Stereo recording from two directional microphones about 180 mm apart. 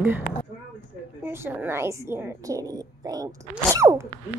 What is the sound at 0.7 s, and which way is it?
A woman's voice, 15° right (ahead or behind).